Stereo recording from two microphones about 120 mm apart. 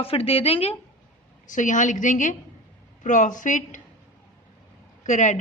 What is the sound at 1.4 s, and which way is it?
A woman's voice, 90° left.